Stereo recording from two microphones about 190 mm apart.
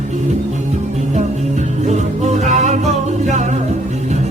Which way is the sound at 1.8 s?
35° right (ahead or behind).